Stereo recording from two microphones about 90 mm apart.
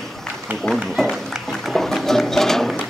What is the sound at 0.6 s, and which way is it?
Speech, 5° left (ahead or behind).